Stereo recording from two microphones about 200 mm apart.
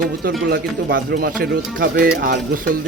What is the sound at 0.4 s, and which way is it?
Speech, 50° right (ahead or behind).